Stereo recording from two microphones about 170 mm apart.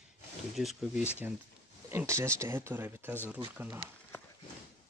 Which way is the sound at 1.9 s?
15° right (ahead or behind).